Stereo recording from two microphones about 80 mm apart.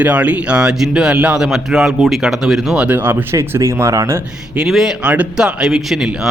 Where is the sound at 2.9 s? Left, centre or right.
Right.